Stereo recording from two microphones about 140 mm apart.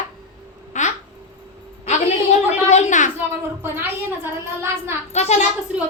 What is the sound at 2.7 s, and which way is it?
Speech, 60° left (ahead or behind).